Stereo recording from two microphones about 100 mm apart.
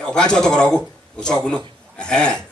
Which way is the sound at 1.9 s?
10° left (ahead or behind).